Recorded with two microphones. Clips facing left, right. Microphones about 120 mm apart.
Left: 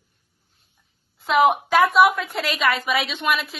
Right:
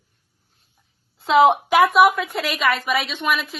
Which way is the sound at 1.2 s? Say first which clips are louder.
Right 3 dB; 30° right (ahead or behind).